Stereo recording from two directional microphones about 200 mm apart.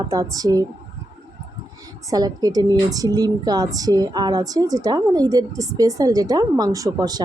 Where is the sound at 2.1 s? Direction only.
20° right (ahead or behind).